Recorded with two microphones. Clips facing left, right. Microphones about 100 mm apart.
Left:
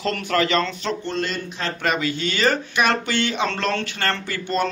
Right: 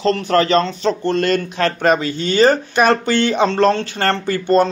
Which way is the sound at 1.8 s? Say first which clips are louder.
Right 4 dB; 35° right (ahead or behind).